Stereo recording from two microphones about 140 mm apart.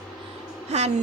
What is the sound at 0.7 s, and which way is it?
Speech, 50° right (ahead or behind).